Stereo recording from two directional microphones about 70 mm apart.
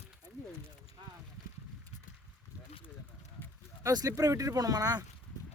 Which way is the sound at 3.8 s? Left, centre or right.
Right.